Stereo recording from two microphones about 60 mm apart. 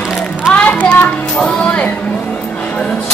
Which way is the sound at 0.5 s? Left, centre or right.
Left.